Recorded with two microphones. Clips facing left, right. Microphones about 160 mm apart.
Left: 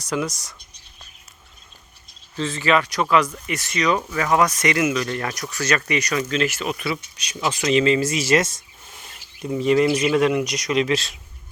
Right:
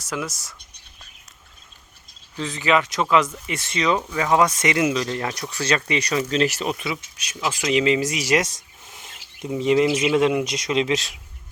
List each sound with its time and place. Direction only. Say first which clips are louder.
0.0 s speech: left 4 dB; 5° right (ahead or behind)
2.3 s speech: left 1 dB; 15° right (ahead or behind); by 6.7 s 35° right (ahead or behind)
6.7 s speech: left 2 dB; 20° right (ahead or behind)
7.2 s speech: left 2 dB; centre (ahead or behind)